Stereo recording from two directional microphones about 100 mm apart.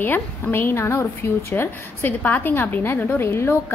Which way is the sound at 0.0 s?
20° left (ahead or behind).